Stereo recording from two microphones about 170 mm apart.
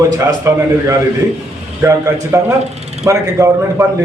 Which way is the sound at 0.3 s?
20° right (ahead or behind).